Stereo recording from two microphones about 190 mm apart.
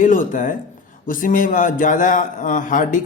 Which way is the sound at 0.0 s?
40° left (ahead or behind).